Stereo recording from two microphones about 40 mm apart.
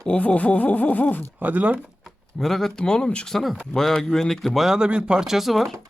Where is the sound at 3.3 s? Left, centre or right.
Centre.